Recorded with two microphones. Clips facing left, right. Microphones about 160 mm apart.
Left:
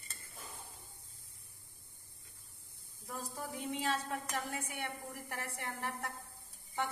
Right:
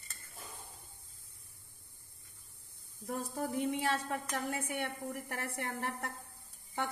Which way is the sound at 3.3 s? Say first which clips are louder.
Right 6 dB; 60° right (ahead or behind).